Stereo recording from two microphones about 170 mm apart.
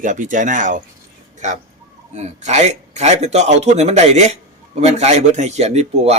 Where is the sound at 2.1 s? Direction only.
40° right (ahead or behind).